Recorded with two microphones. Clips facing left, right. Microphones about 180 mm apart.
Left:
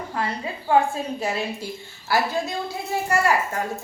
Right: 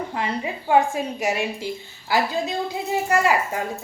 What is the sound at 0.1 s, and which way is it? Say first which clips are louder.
A woman's voice: right 1 dB; 15° right (ahead or behind).